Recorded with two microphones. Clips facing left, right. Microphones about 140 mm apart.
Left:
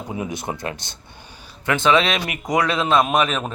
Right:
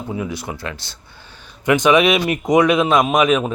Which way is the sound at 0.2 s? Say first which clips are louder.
Right 1 dB; 20° left (ahead or behind).